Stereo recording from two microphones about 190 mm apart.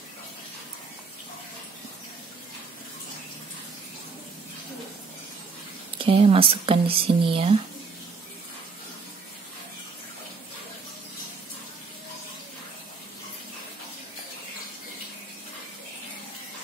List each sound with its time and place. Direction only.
5.9 s speech: 30° right (ahead or behind)